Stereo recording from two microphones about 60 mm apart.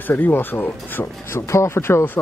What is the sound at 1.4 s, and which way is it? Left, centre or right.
Speech, left.